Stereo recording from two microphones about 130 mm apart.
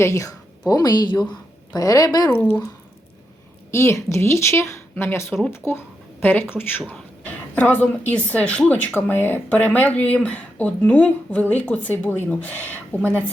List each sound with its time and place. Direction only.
0.0 s a woman's voice: 25° left (ahead or behind)
2.3 s speech: 15° left (ahead or behind)
3.7 s a woman's voice: 20° left (ahead or behind)